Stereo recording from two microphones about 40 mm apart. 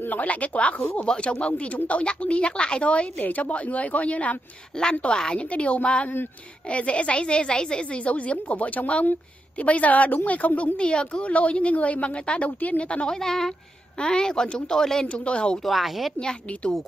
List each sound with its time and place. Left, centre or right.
0.1 s a woman's voice: left
1.0 s a woman's voice: left
1.5 s a woman's voice: left
2.9 s a woman's voice: left
4.7 s a woman's voice: left
5.4 s a woman's voice: left
8.0 s a woman's voice: left
10.8 s a woman's voice: left
12.4 s a woman's voice: left
12.8 s a woman's voice: left
13.1 s a woman's voice: centre
15.0 s a woman's voice: left
15.6 s a woman's voice: centre
16.2 s a woman's voice: left